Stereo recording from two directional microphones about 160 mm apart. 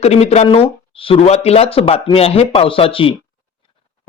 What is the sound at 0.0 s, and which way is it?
Speech, 40° left (ahead or behind).